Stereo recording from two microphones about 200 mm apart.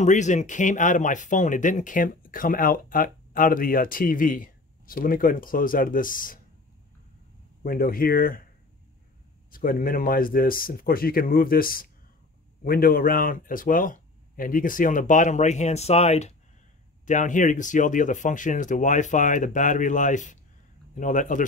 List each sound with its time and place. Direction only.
0.0 s speech: 35° left (ahead or behind)
7.6 s speech: 45° left (ahead or behind)
9.5 s speech: 45° left (ahead or behind)